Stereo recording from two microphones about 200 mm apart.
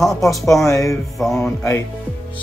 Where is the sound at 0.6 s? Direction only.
15° left (ahead or behind).